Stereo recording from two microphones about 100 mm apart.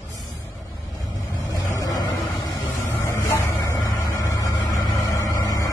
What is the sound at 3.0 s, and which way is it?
Vehicle, 30° left (ahead or behind).